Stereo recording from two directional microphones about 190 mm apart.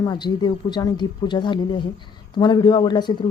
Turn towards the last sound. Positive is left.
turn(degrees=25)  # may be behind; listen again after turning